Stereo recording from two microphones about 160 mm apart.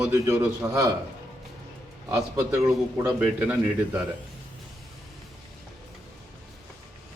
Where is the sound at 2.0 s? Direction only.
15° right (ahead or behind).